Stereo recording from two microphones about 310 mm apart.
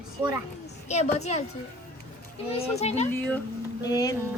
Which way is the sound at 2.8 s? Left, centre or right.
Left.